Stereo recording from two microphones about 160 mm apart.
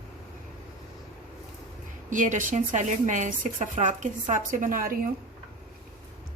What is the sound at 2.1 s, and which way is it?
A woman's voice, 55° right (ahead or behind).